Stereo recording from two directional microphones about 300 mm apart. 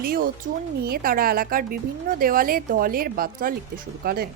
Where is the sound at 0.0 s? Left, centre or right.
Right.